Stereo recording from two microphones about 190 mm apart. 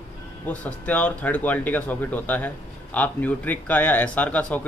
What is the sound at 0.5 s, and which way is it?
Speech, 10° left (ahead or behind).